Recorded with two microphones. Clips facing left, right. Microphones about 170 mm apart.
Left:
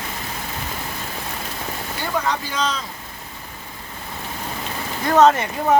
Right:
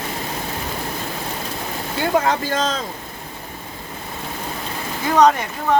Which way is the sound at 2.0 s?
55° right (ahead or behind).